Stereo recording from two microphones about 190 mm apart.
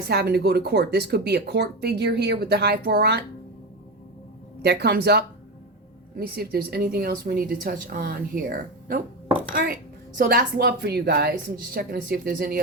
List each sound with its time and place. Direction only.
0.1 s speech: 55° right (ahead or behind)
4.6 s speech: 60° right (ahead or behind)